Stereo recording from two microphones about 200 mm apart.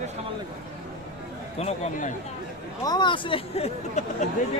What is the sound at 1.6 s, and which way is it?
Speech, 35° left (ahead or behind).